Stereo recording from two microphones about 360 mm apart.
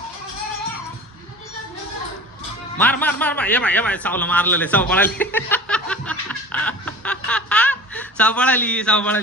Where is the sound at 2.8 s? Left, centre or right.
Centre.